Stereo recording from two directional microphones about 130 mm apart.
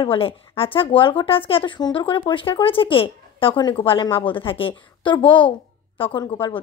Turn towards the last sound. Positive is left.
turn(degrees=40)  # may be behind; listen again after turning